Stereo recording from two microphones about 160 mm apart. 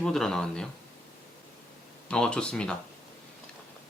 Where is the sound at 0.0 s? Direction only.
5° left (ahead or behind).